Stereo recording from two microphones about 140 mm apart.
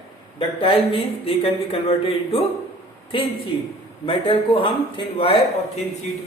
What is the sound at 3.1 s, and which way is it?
A man's voice, 40° left (ahead or behind).